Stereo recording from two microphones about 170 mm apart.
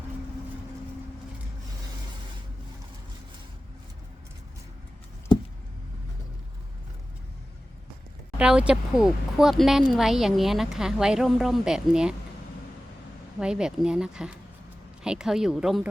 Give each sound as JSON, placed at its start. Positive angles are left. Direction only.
{"t": 8.4, "sound": "speech", "side_deg": -5}
{"t": 13.4, "sound": "speech", "side_deg": -5}